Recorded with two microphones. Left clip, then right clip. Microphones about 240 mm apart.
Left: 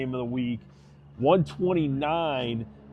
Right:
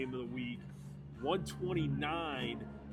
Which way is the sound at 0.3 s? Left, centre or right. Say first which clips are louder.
Left 11 dB; left.